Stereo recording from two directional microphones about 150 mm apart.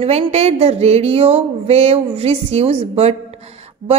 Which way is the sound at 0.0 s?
45° right (ahead or behind).